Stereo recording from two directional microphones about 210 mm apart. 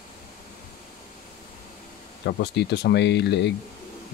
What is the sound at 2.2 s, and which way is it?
Speech, 50° left (ahead or behind).